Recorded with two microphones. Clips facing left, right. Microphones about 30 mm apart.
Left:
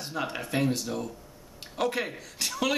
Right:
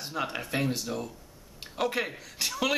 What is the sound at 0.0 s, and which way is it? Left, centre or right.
A man's voice, centre.